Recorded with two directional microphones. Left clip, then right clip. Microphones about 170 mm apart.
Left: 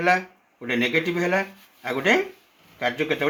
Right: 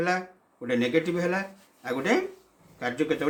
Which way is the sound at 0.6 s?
35° left (ahead or behind).